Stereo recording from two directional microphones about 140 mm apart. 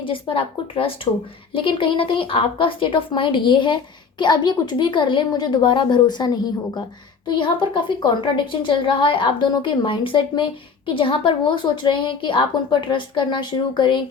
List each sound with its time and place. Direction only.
0.0 s a woman's voice: 40° left (ahead or behind)